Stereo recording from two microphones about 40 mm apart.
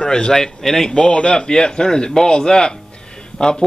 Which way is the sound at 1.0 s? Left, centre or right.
Left.